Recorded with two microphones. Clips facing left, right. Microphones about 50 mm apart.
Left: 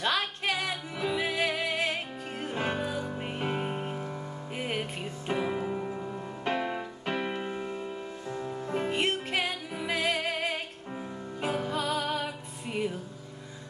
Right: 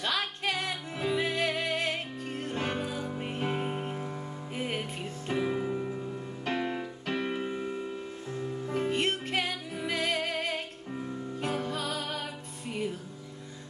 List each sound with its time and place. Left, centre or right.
0.4 s music: centre
4.6 s music: centre
8.4 s music: centre
11.7 s music: left